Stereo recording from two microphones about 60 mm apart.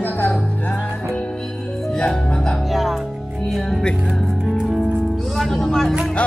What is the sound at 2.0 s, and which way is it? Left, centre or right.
Speech, centre.